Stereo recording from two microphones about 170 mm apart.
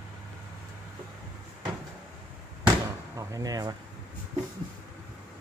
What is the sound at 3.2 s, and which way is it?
Speech, 20° right (ahead or behind).